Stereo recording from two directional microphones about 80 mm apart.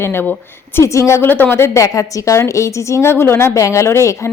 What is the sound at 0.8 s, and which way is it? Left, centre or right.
Speech, left.